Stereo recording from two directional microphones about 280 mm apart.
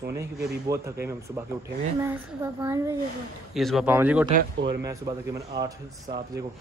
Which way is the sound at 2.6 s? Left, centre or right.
Centre.